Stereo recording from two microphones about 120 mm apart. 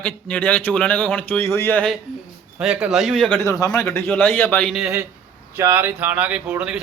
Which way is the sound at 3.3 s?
20° left (ahead or behind).